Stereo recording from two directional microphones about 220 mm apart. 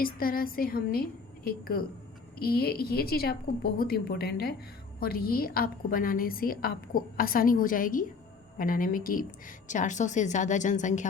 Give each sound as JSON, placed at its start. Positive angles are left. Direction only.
{"t": 0.0, "sound": "a woman's voice", "side_deg": 40}